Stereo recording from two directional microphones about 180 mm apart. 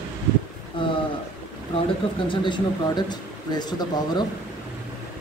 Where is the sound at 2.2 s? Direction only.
25° left (ahead or behind).